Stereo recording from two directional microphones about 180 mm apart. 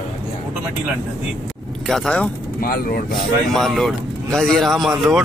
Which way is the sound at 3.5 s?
Centre (ahead or behind).